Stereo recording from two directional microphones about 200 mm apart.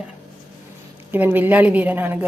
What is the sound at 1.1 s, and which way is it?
Speech, 10° right (ahead or behind).